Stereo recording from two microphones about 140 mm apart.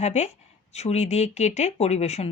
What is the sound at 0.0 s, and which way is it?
Speech, 50° left (ahead or behind).